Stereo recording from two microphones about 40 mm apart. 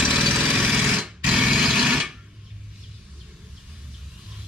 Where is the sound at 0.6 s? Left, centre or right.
Right.